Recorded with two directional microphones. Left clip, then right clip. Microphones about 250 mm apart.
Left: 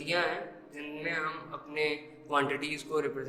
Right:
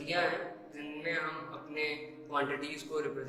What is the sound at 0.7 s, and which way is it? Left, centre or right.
Music, left.